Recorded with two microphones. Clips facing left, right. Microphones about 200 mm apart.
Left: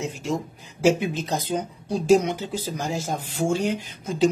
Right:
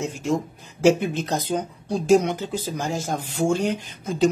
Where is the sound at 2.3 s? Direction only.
50° right (ahead or behind).